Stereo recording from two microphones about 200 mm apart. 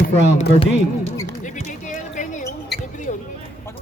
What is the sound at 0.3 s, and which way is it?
Speech, 30° left (ahead or behind).